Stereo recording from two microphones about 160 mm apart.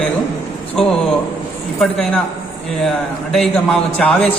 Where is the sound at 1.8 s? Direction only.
5° left (ahead or behind).